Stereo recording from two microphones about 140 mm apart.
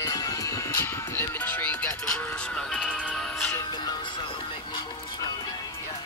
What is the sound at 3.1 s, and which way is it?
Music, 5° left (ahead or behind).